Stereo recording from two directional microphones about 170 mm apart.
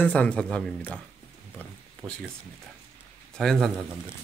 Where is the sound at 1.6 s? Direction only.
5° left (ahead or behind).